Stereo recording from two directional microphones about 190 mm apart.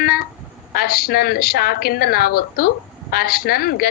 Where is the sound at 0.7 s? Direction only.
50° left (ahead or behind).